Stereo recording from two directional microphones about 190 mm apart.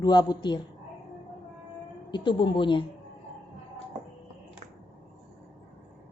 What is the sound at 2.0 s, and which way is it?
Speech, 25° left (ahead or behind).